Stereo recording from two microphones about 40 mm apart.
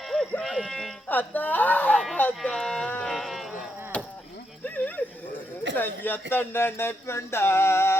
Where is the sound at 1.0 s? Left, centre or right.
Left.